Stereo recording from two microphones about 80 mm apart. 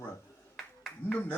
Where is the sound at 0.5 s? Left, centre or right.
Centre.